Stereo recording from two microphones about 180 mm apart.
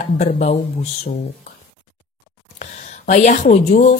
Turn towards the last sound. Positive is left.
turn(degrees=40)  # may be behind; listen again after turning